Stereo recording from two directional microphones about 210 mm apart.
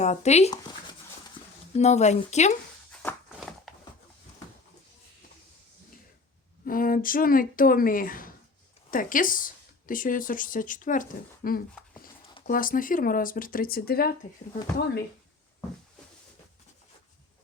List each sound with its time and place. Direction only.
0.0 s speech: 35° left (ahead or behind)
1.7 s speech: 30° left (ahead or behind)
3.0 s a sound: 5° left (ahead or behind)
6.7 s speech: 40° left (ahead or behind)